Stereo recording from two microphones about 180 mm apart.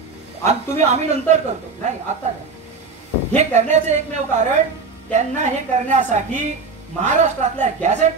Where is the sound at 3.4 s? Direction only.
40° right (ahead or behind).